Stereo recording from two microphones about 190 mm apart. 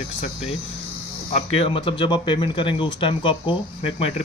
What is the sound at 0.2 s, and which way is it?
Speech, 35° left (ahead or behind).